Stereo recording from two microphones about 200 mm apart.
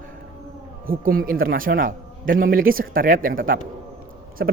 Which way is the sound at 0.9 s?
45° right (ahead or behind).